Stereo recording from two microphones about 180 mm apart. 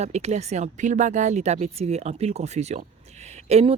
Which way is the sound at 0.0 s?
35° right (ahead or behind).